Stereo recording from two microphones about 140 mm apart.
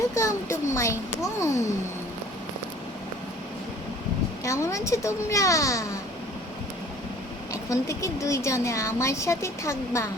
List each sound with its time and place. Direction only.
0.1 s a child's voice: 20° left (ahead or behind)
4.4 s a woman's voice: 20° left (ahead or behind)
7.7 s a woman's voice: 20° left (ahead or behind)